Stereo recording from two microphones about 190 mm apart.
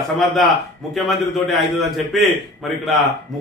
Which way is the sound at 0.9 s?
Centre (ahead or behind).